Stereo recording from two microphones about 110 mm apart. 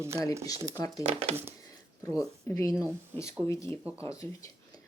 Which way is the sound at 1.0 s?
70° right (ahead or behind).